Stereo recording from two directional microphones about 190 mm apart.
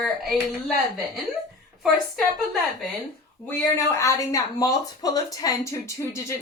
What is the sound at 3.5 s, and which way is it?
Speech, 15° left (ahead or behind).